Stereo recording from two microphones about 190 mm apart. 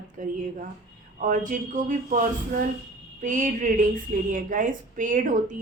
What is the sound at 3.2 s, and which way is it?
A woman's voice, 40° right (ahead or behind).